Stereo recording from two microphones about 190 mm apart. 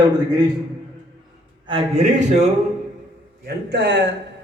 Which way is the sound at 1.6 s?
30° right (ahead or behind).